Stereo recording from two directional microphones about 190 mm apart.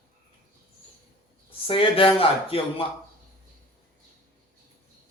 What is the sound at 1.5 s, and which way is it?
Speech, 30° left (ahead or behind).